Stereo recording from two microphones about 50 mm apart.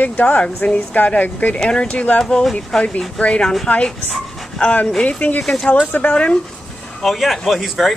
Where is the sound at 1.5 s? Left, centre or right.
Centre.